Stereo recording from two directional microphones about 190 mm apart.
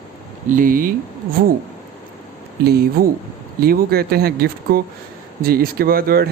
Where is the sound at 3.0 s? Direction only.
50° right (ahead or behind).